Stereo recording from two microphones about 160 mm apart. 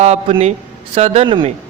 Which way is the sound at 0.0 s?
45° right (ahead or behind).